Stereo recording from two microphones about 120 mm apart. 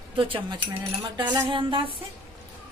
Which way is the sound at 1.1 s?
35° right (ahead or behind).